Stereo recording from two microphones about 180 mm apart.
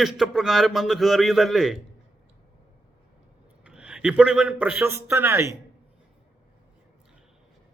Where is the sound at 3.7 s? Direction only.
5° right (ahead or behind).